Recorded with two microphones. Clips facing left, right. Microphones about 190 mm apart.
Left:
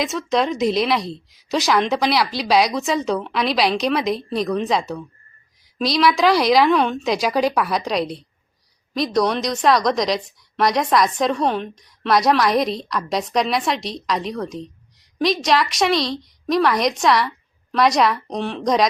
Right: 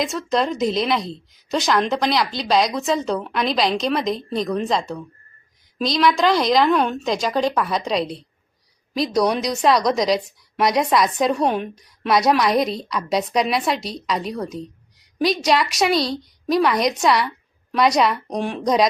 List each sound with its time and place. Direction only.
0.0 s a woman's voice: centre (ahead or behind)
18.3 s speech: 10° right (ahead or behind)